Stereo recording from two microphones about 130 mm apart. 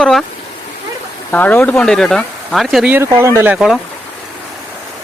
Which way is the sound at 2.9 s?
20° right (ahead or behind).